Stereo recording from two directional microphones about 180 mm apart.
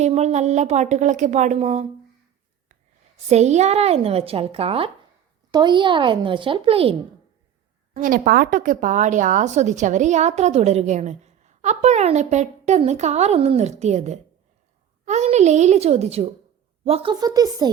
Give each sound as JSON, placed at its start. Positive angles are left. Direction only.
{"t": 0.0, "sound": "speech", "side_deg": -40}
{"t": 3.2, "sound": "speech", "side_deg": -40}
{"t": 7.9, "sound": "speech", "side_deg": -50}